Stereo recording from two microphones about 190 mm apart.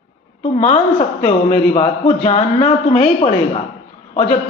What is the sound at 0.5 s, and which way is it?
A man's voice, 35° left (ahead or behind).